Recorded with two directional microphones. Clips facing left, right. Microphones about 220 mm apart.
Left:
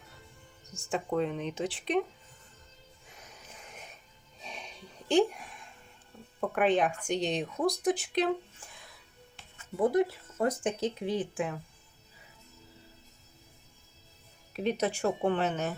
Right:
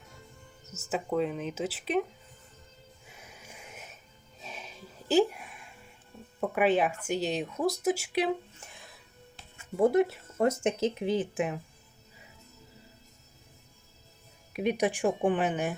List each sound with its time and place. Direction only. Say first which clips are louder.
0.6 s speech: even; 5° right (ahead or behind)
3.1 s a sound: right 1 dB; 5° right (ahead or behind)
4.4 s music: right 1 dB; 5° right (ahead or behind)
6.4 s speech: right 1 dB; 5° right (ahead or behind)
8.6 s music: right 2 dB; 25° right (ahead or behind)
9.3 s speech: right 3 dB; 25° right (ahead or behind)
14.5 s a woman's voice: right 2 dB; 10° right (ahead or behind)